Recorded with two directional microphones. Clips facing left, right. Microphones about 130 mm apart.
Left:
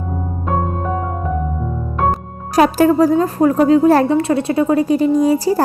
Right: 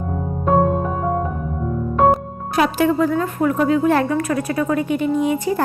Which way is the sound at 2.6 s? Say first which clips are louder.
Left 5 dB; 40° left (ahead or behind).